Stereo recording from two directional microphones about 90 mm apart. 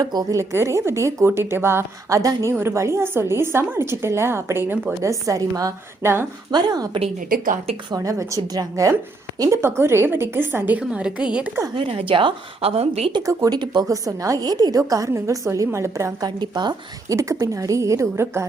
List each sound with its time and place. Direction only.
0.0 s a woman's voice: 45° right (ahead or behind)
0.5 s a woman's voice: 30° right (ahead or behind)
5.0 s a woman's voice: 40° right (ahead or behind)
6.0 s a woman's voice: 25° right (ahead or behind)
6.5 s a woman's voice: 50° right (ahead or behind)
7.9 s a woman's voice: 40° right (ahead or behind); by 10.8 s 25° right (ahead or behind)
10.8 s a woman's voice: 10° right (ahead or behind)
11.7 s a woman's voice: 80° right
13.2 s a woman's voice: 40° right (ahead or behind)
16.2 s a woman's voice: 55° right (ahead or behind)
17.1 s a woman's voice: 35° right (ahead or behind)